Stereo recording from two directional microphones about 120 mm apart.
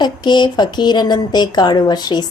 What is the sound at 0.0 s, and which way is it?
Speech, 40° left (ahead or behind).